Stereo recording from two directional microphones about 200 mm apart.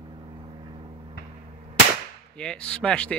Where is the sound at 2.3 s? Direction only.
5° left (ahead or behind).